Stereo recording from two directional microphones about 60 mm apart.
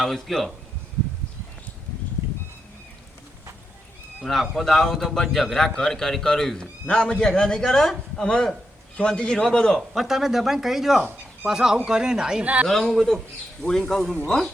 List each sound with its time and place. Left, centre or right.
0.0 s speech: centre
4.2 s a man's voice: centre
9.9 s speech: centre
12.6 s speech: centre